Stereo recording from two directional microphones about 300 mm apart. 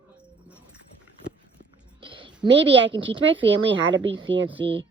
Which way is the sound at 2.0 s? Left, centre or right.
Centre.